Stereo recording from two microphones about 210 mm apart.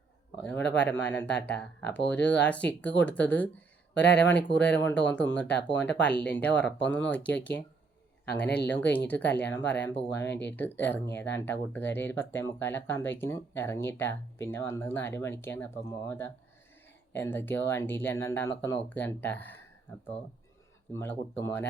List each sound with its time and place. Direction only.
0.8 s speech: 5° left (ahead or behind)
3.9 s speech: 55° left (ahead or behind)
4.2 s speech: 5° left (ahead or behind)
8.4 s speech: 5° left (ahead or behind)
20.9 s speech: 10° left (ahead or behind)